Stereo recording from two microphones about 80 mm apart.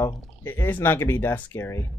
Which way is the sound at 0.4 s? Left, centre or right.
Left.